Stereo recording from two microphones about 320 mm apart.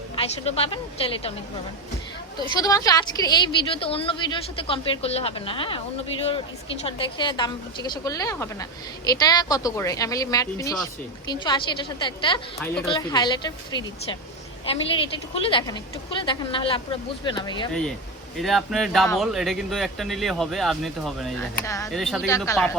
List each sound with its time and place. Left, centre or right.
0.2 s a woman's voice: centre
2.6 s a woman's voice: centre
6.8 s a woman's voice: centre
18.3 s speech: centre